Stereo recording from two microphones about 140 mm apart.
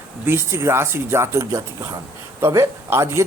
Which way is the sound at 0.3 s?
15° right (ahead or behind).